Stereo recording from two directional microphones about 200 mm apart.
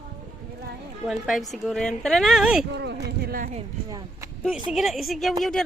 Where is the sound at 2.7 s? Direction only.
60° right (ahead or behind).